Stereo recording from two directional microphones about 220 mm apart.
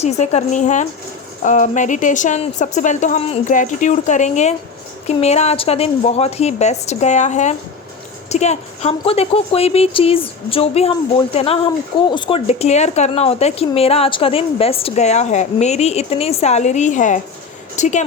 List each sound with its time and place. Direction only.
0.0 s speech: 30° left (ahead or behind)